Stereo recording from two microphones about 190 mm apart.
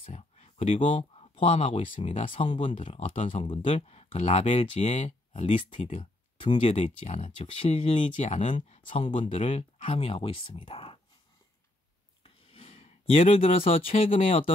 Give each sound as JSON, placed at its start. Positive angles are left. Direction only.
{"t": 0.0, "sound": "a sound", "side_deg": 35}
{"t": 1.3, "sound": "speech", "side_deg": 30}
{"t": 12.2, "sound": "speech", "side_deg": 30}